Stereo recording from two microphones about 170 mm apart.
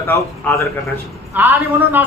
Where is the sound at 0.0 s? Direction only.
15° left (ahead or behind).